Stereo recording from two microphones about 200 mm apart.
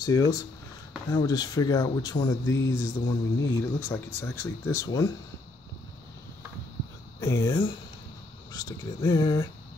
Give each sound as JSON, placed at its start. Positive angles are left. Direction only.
{"t": 0.0, "sound": "speech", "side_deg": 20}
{"t": 7.2, "sound": "speech", "side_deg": 15}